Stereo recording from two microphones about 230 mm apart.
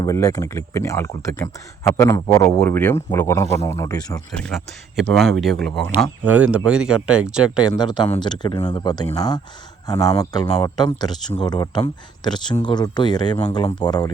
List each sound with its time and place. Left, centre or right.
0.0 s speech: centre
4.3 s speech: centre
7.8 s speech: centre
11.1 s speech: centre
11.4 s speech: centre